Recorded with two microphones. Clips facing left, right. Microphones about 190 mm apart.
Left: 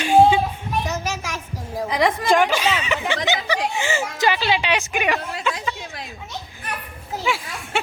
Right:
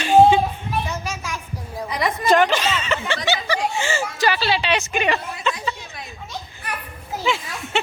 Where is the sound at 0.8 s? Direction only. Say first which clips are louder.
Left 3 dB; 45° left (ahead or behind).